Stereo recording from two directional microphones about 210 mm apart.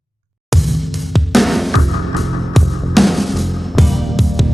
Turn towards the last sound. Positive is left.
turn(degrees=0)  # may be behind; listen again after turning